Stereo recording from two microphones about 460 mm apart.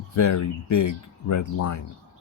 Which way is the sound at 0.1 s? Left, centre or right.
Left.